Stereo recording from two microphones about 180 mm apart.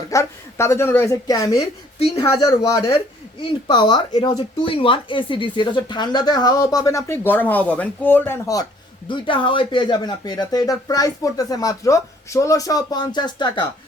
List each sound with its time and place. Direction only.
0.1 s speech: 15° left (ahead or behind)
2.2 s speech: 30° left (ahead or behind)
9.0 s speech: 25° left (ahead or behind)